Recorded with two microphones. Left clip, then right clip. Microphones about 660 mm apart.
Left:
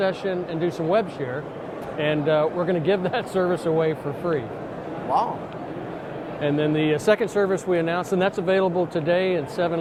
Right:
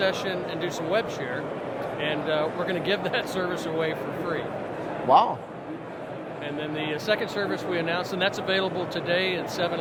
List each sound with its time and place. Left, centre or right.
0.0 s speech: left
5.1 s a man's voice: right
6.4 s speech: left